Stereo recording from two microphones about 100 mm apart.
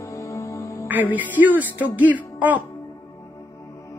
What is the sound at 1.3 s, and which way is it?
A woman's voice, 15° right (ahead or behind).